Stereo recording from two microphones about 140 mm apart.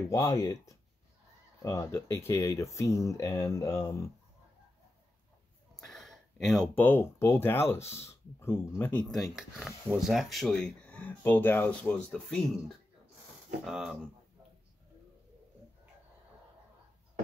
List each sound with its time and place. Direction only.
0.1 s speech: 20° left (ahead or behind)
5.9 s a sound: centre (ahead or behind)
6.7 s speech: 15° left (ahead or behind); by 13.9 s centre (ahead or behind)